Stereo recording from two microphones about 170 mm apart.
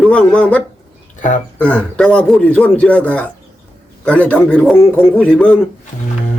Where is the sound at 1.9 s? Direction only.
5° left (ahead or behind).